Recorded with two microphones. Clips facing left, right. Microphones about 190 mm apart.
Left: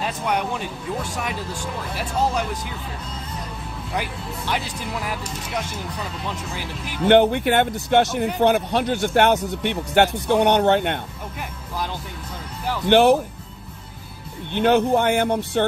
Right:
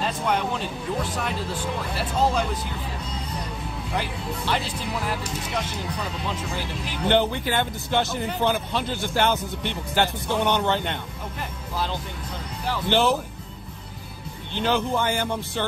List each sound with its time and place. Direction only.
0.0 s a sound: 10° left (ahead or behind)
3.9 s speech: 10° left (ahead or behind)
7.1 s speech: 60° left (ahead or behind)
12.9 s speech: 60° left (ahead or behind)
14.5 s speech: 60° left (ahead or behind)
15.0 s speech: 65° left (ahead or behind)